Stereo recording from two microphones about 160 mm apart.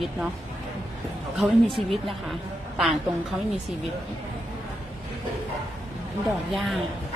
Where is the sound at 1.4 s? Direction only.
Centre (ahead or behind).